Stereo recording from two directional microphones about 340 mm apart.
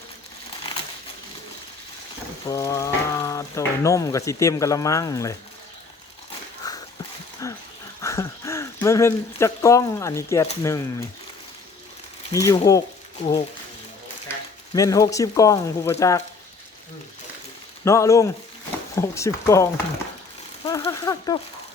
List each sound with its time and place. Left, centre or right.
2.5 s speech: centre
6.6 s a sound: centre
7.4 s dog: centre
8.0 s speech: centre
12.3 s speech: centre
14.7 s speech: centre
17.8 s speech: centre